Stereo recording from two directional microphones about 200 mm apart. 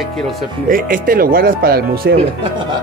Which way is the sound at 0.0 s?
Centre (ahead or behind).